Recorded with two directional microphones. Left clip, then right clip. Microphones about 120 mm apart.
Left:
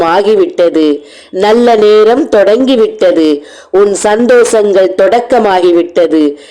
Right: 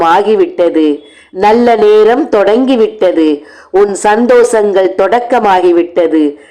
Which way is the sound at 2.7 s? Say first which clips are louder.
Left 1 dB; 30° left (ahead or behind).